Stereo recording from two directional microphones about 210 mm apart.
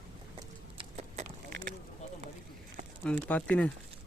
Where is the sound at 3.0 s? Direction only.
5° left (ahead or behind).